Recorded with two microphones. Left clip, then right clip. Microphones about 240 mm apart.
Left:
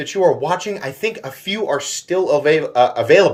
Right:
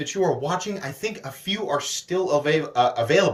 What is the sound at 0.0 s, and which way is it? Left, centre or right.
Speech, centre.